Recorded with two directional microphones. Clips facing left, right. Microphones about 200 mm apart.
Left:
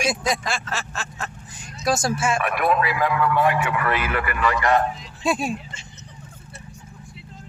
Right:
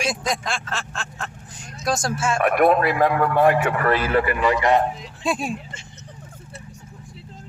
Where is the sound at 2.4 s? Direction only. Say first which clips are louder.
Right 5 dB; 50° right (ahead or behind); by 4.8 s 20° right (ahead or behind).